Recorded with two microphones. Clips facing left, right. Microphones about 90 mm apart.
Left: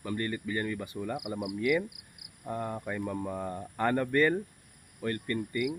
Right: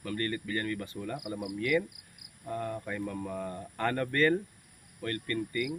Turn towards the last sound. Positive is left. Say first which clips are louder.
# left 1 dB
turn(degrees=15)  # may be behind; listen again after turning